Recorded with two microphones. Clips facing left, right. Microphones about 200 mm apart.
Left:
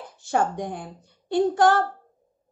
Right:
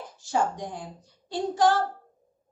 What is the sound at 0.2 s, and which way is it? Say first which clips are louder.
A woman's voice: left 3 dB; 60° left (ahead or behind).